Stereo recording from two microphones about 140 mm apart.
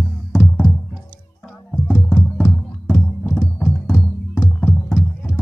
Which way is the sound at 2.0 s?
Centre (ahead or behind).